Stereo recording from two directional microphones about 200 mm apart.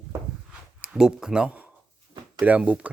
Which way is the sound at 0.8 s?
5° right (ahead or behind).